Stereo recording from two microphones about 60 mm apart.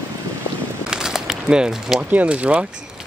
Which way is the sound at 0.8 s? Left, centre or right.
Centre.